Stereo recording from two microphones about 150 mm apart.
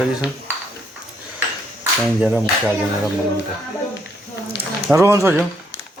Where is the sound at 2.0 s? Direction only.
5° right (ahead or behind).